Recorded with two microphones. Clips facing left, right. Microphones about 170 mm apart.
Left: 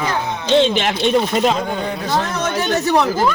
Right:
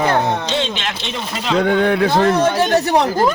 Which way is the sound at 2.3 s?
35° right (ahead or behind).